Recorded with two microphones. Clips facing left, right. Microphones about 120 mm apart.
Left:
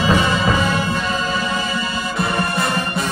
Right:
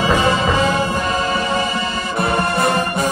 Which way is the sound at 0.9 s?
50° right (ahead or behind).